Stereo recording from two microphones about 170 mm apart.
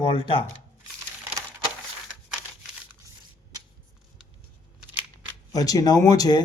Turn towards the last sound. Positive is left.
turn(degrees=20)  # may be behind; listen again after turning